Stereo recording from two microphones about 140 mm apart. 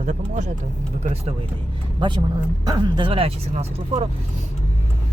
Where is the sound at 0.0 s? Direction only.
60° right (ahead or behind).